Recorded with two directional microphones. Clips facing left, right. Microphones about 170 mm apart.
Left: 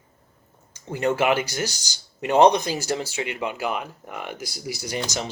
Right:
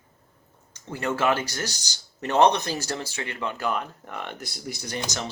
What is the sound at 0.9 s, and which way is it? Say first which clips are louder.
Speech: left 3 dB; 15° left (ahead or behind).